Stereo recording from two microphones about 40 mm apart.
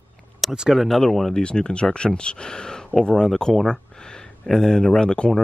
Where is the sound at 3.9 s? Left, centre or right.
Centre.